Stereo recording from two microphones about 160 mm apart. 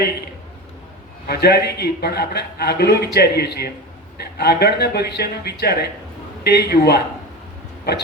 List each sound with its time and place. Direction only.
1.3 s a man's voice: 90° left